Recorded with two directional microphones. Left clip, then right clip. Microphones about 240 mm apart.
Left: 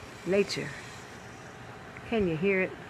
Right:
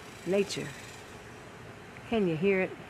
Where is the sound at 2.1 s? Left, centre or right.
Centre.